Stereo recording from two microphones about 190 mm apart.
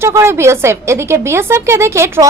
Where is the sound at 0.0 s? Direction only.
15° right (ahead or behind).